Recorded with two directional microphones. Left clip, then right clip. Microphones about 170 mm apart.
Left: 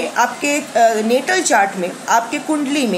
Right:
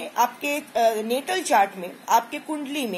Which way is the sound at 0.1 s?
20° right (ahead or behind).